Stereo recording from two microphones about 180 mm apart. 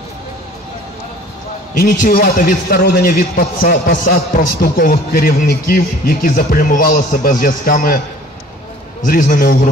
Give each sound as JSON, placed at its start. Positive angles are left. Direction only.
{"t": 1.8, "sound": "a man's voice", "side_deg": 50}
{"t": 9.0, "sound": "a man's voice", "side_deg": 50}